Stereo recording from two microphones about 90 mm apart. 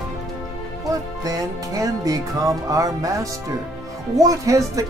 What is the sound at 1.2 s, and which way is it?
Music, 40° right (ahead or behind).